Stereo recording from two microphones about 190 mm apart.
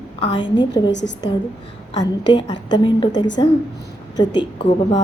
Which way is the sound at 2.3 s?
25° left (ahead or behind).